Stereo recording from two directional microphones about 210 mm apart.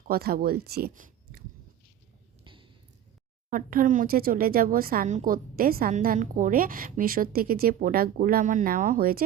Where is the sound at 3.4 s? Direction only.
40° right (ahead or behind).